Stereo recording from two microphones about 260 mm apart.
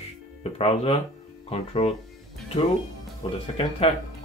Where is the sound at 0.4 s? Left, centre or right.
Left.